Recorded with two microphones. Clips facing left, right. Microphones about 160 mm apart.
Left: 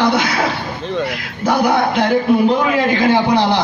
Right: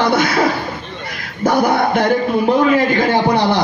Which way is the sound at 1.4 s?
50° right (ahead or behind).